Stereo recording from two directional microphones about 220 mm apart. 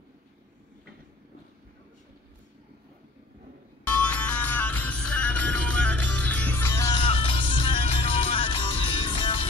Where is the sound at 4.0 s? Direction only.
5° left (ahead or behind).